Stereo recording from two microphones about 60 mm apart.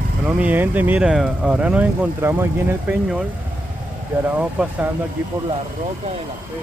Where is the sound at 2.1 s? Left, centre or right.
Right.